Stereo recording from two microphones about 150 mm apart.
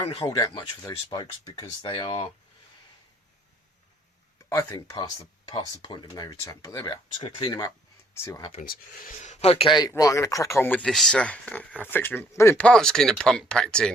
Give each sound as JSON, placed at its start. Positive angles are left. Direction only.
{"t": 0.0, "sound": "speech", "side_deg": 40}
{"t": 0.3, "sound": "speech", "side_deg": 25}
{"t": 4.4, "sound": "speech", "side_deg": 20}
{"t": 8.6, "sound": "speech", "side_deg": 70}
{"t": 9.7, "sound": "speech", "side_deg": 25}